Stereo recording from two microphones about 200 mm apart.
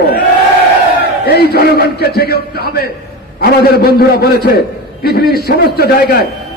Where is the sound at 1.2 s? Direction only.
55° left (ahead or behind).